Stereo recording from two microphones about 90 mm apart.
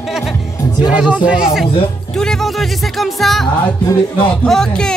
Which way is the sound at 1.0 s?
10° right (ahead or behind).